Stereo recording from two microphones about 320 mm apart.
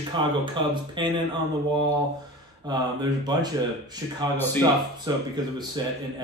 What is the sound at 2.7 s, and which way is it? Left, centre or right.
Speech, centre.